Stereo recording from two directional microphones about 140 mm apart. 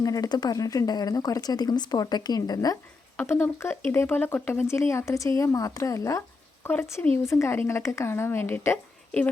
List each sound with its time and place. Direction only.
0.0 s speech: 25° left (ahead or behind)
3.2 s speech: 15° left (ahead or behind)